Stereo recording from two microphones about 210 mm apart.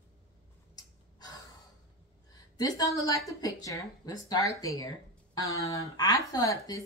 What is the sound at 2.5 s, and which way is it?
Speech, 20° left (ahead or behind).